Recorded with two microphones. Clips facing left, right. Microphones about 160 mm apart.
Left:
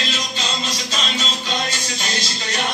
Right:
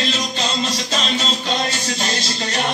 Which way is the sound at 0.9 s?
40° right (ahead or behind).